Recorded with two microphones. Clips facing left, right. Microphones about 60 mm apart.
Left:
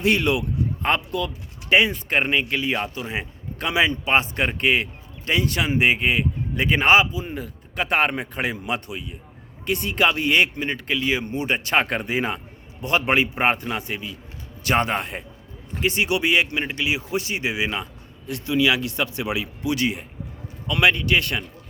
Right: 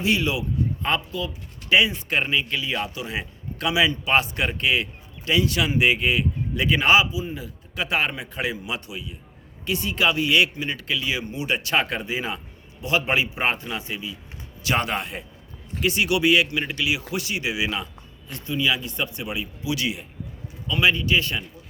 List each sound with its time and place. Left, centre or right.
0.0 s speech: left
1.7 s speech: left
14.6 s speech: left
18.3 s a man's voice: left
19.6 s speech: left
20.7 s a man's voice: left